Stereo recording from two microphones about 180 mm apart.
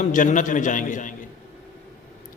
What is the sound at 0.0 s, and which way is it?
A man's voice, 45° left (ahead or behind).